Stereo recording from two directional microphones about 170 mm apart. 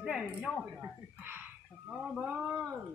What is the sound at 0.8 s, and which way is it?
Speech, 10° right (ahead or behind).